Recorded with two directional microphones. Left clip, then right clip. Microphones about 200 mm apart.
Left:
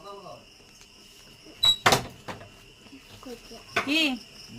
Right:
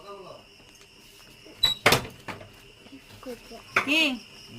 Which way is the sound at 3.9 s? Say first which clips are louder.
Right 1 dB; 25° left (ahead or behind).